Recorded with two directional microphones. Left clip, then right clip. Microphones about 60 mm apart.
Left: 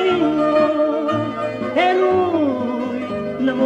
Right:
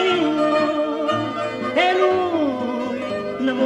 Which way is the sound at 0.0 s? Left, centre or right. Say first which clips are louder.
Left 1 dB; right.